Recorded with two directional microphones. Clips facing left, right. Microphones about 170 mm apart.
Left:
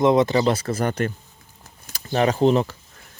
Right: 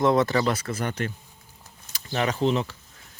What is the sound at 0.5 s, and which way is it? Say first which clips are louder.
Speech: left 6 dB; 35° left (ahead or behind).